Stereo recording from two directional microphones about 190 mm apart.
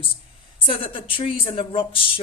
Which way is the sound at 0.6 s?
25° left (ahead or behind).